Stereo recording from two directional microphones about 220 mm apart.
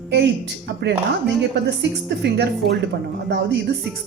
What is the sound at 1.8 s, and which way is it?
Speech, 50° right (ahead or behind).